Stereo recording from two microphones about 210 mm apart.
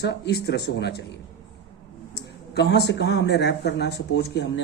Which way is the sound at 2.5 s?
50° left (ahead or behind).